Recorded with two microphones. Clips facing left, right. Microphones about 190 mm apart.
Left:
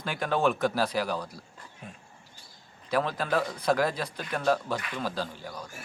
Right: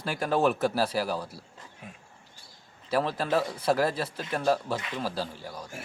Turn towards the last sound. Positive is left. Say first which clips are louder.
# even
turn(degrees=-5)  # may be behind; listen again after turning